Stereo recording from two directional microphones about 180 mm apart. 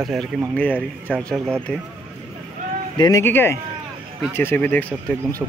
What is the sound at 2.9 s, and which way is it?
Speech, 25° left (ahead or behind).